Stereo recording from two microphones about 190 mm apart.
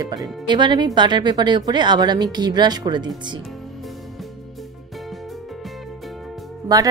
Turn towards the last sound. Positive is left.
turn(degrees=-20)  # may be behind; listen again after turning